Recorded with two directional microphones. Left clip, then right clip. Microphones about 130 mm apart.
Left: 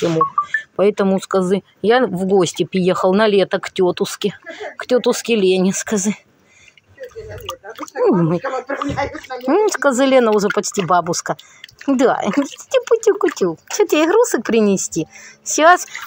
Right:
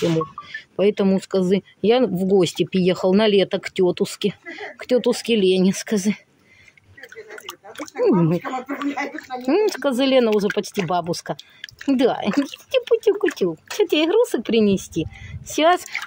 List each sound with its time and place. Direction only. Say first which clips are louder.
0.1 s speech: left 8 dB; 15° right (ahead or behind)
8.3 s speech: left 4 dB; 10° right (ahead or behind)
15.5 s speech: left 6 dB; 20° right (ahead or behind)